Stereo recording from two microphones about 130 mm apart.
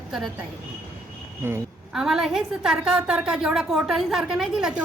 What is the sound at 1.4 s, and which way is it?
Speech, 20° right (ahead or behind).